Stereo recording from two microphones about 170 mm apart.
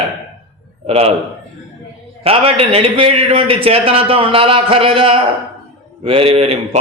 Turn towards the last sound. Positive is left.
turn(degrees=-35)  # may be behind; listen again after turning